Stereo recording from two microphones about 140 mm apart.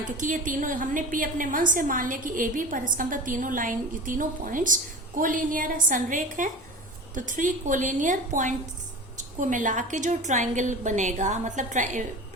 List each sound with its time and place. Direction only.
0.0 s a woman's voice: 70° right (ahead or behind)